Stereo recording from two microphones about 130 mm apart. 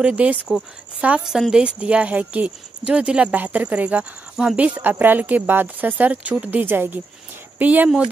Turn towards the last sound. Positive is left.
turn(degrees=-10)  # may be behind; listen again after turning